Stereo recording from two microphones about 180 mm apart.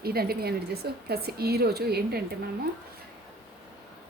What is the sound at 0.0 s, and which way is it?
Speech, 60° right (ahead or behind).